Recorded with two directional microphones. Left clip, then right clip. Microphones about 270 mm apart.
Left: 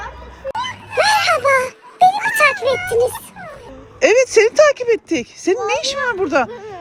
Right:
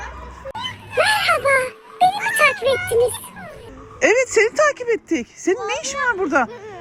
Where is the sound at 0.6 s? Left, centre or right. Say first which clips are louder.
Left 3 dB; left.